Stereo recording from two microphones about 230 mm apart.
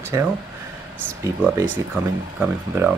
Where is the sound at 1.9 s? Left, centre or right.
Centre.